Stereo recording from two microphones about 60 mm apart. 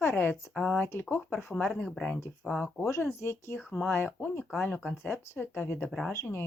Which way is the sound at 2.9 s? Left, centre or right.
Left.